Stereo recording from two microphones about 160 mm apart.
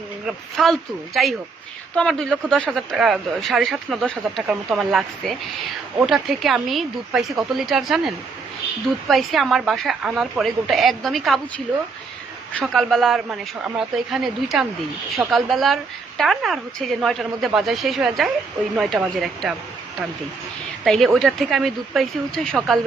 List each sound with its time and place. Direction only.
0.5 s speech: centre (ahead or behind)
20.8 s speech: centre (ahead or behind)